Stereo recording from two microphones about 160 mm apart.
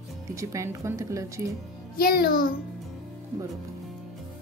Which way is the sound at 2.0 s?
70° left (ahead or behind).